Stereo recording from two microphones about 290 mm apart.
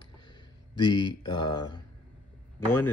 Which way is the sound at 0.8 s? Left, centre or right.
Centre.